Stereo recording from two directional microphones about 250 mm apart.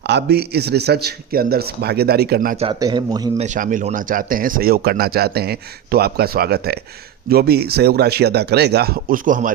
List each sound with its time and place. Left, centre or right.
0.0 s speech: right
2.6 s a man's voice: centre
3.4 s speech: right